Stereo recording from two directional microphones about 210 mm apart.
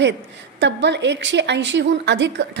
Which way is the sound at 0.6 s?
55° right (ahead or behind).